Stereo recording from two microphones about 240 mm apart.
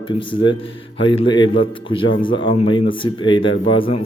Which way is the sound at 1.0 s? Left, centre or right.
Left.